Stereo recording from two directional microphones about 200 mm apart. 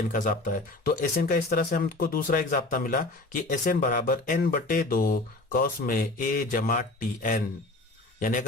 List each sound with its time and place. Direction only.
0.1 s speech: 40° left (ahead or behind)